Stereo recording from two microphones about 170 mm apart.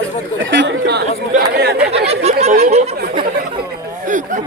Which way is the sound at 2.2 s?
40° right (ahead or behind).